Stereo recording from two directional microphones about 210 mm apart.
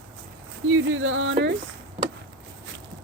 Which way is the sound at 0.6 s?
70° right (ahead or behind).